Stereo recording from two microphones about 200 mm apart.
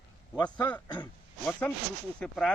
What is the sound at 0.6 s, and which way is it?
Speech, 10° left (ahead or behind).